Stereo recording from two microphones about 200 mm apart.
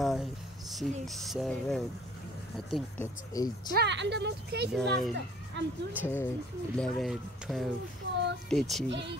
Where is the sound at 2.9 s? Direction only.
20° left (ahead or behind).